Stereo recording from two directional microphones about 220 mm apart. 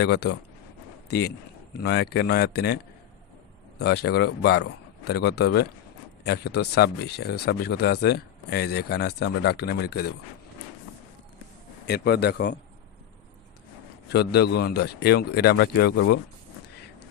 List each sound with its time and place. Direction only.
0.0 s speech: 50° left (ahead or behind)
1.8 s speech: 50° left (ahead or behind)
11.9 s speech: 45° left (ahead or behind)
14.1 s speech: 45° left (ahead or behind)